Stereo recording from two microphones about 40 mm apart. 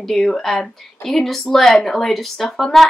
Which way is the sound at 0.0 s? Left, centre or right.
Centre.